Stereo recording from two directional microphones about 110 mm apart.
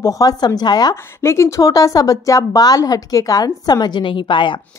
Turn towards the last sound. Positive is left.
turn(degrees=45)  # may be behind; listen again after turning